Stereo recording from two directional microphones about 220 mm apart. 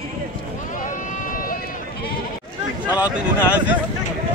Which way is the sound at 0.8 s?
35° left (ahead or behind).